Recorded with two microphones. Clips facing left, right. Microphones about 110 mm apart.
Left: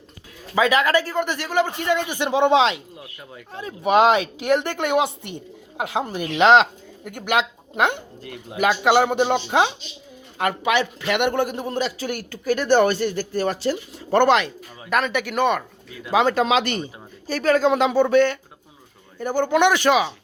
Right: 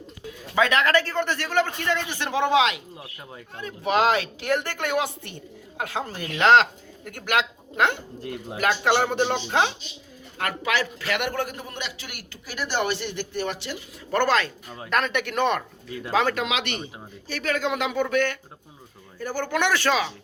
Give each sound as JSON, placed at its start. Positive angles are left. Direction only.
{"t": 0.5, "sound": "a man's voice", "side_deg": 5}
{"t": 8.2, "sound": "speech", "side_deg": -30}
{"t": 8.5, "sound": "a man's voice", "side_deg": 15}
{"t": 14.2, "sound": "speech", "side_deg": 20}
{"t": 14.8, "sound": "speech", "side_deg": 5}
{"t": 16.3, "sound": "a man's voice", "side_deg": 35}